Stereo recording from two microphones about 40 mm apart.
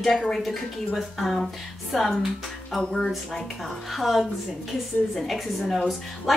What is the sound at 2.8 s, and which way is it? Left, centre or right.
Speech, left.